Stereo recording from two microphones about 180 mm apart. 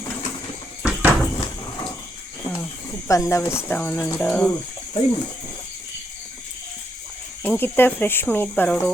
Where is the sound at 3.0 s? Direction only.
15° left (ahead or behind).